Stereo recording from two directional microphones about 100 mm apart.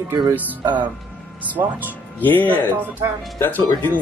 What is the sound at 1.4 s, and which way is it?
Speech, 15° right (ahead or behind).